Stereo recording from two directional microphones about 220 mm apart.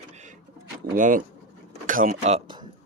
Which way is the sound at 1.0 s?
35° right (ahead or behind).